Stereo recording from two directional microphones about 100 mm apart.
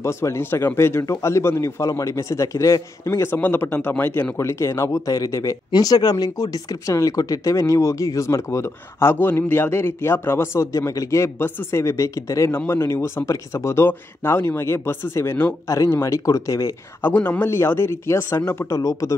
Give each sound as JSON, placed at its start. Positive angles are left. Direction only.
{"t": 0.0, "sound": "a man's voice", "side_deg": 30}
{"t": 17.0, "sound": "a man's voice", "side_deg": 15}